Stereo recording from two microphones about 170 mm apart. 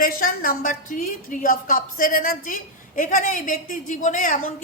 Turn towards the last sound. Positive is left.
turn(degrees=50)  # may be behind; listen again after turning